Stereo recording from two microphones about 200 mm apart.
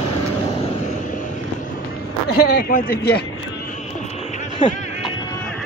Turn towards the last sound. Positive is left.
turn(degrees=25)  # may be behind; listen again after turning